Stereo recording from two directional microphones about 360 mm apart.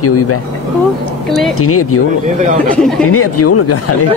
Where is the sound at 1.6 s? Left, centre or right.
Left.